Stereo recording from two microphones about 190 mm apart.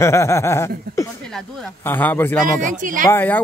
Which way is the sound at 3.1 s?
10° left (ahead or behind).